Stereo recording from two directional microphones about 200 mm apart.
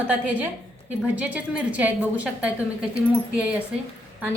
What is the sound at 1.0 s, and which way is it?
A woman's voice, 5° right (ahead or behind).